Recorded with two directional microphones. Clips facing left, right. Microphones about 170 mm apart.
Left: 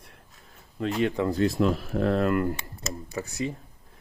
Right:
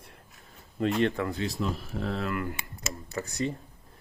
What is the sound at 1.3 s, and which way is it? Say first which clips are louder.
Speech: left 8 dB; 45° left (ahead or behind).